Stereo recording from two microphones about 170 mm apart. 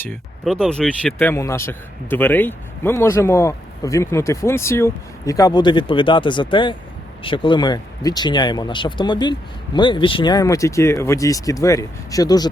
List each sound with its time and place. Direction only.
0.4 s a man's voice: 5° left (ahead or behind); by 12.5 s 20° left (ahead or behind)